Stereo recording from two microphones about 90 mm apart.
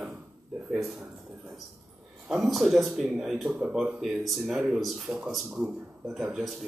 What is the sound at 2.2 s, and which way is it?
Speech, 5° right (ahead or behind).